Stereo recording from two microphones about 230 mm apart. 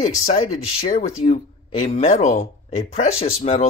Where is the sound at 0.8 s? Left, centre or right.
Left.